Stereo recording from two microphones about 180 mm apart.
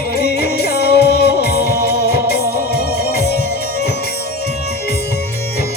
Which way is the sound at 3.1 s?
65° left (ahead or behind).